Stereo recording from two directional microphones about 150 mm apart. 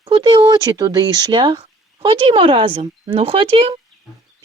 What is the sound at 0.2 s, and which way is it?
Speech, 30° right (ahead or behind).